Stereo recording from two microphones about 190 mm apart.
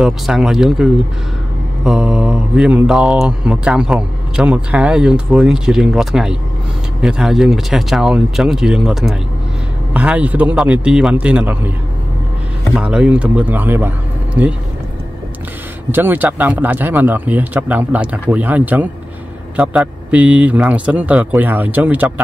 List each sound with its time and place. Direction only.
0.0 s speech: centre (ahead or behind)
1.9 s speech: 5° right (ahead or behind)
12.7 s speech: 5° right (ahead or behind)
15.9 s speech: 10° right (ahead or behind)